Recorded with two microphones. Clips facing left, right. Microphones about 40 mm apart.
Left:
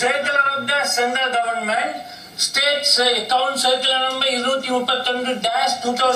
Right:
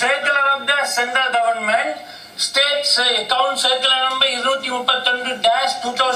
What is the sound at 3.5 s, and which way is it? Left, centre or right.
A man's voice, right.